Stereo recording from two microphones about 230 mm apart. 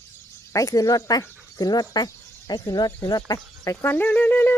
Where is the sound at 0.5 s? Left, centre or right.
Centre.